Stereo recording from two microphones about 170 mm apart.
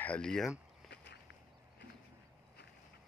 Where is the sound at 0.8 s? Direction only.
80° left.